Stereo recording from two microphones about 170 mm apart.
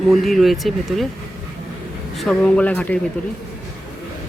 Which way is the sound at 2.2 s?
5° left (ahead or behind).